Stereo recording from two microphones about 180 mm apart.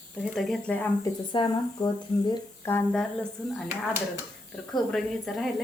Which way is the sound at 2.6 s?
10° left (ahead or behind).